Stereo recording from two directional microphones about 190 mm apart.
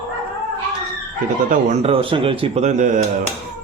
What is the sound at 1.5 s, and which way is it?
A man's voice, 35° right (ahead or behind).